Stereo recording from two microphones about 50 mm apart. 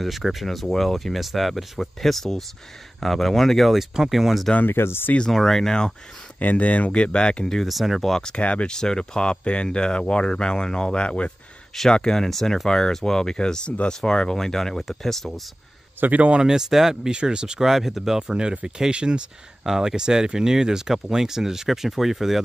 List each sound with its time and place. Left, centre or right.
0.0 s speech: centre
3.9 s speech: centre
4.6 s speech: left
5.3 s speech: centre
6.4 s speech: left; by 7.6 s centre
7.6 s speech: centre
8.4 s speech: left
11.7 s speech: centre
16.0 s a man's voice: right
16.3 s speech: centre
18.2 s speech: right
19.6 s speech: centre